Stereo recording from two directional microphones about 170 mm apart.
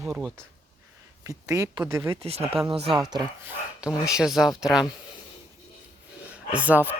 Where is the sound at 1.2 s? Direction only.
20° right (ahead or behind).